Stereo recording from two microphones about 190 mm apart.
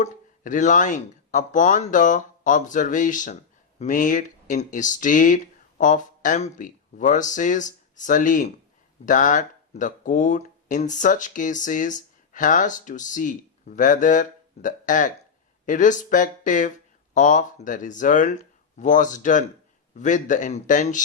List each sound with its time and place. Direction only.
0.0 s a man's voice: 40° left (ahead or behind)